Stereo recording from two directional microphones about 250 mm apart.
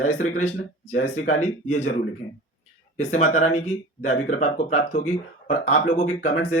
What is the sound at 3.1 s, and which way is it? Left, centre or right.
Speech, left.